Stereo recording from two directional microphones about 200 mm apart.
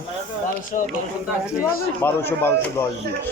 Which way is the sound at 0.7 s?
35° left (ahead or behind).